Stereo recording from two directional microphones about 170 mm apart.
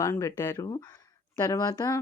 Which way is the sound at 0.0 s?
20° left (ahead or behind).